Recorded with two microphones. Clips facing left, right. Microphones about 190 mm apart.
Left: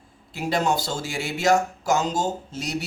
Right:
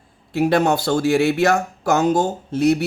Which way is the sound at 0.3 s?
60° right (ahead or behind).